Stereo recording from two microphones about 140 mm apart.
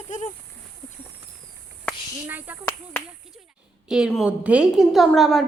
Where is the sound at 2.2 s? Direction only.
15° right (ahead or behind).